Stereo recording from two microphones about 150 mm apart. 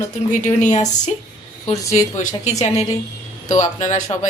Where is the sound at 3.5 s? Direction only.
55° left (ahead or behind).